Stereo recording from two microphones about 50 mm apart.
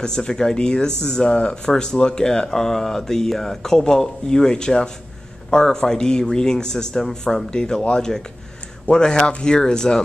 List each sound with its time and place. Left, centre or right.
0.0 s speech: centre